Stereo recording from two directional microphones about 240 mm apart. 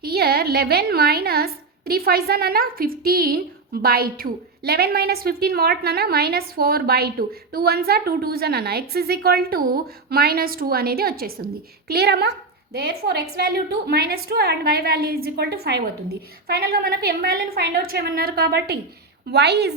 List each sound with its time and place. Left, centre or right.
0.0 s a woman's voice: right